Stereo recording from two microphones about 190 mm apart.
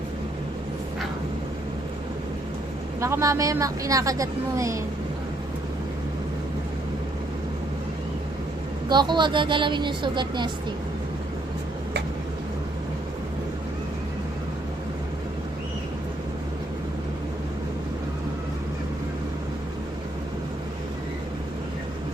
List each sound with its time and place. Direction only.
3.0 s a woman's voice: 15° right (ahead or behind)
8.9 s speech: 25° right (ahead or behind)